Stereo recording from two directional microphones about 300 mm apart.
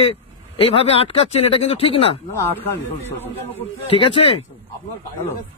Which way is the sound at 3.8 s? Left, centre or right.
Centre.